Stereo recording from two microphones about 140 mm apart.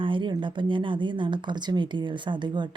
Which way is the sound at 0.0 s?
35° right (ahead or behind).